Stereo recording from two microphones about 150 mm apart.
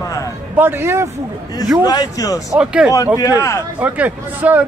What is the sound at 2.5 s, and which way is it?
Speech, 5° right (ahead or behind).